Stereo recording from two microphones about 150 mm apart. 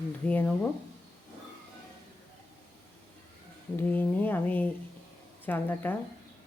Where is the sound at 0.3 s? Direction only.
10° left (ahead or behind).